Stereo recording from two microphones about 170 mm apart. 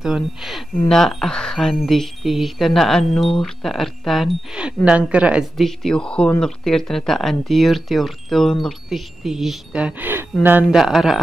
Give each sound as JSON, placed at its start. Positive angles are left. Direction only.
{"t": 0.0, "sound": "speech", "side_deg": 0}